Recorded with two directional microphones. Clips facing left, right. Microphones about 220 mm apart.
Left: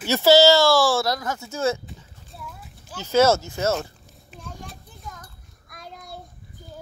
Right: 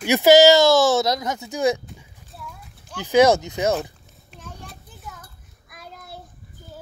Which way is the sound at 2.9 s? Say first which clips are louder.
Right 3 dB; 15° right (ahead or behind).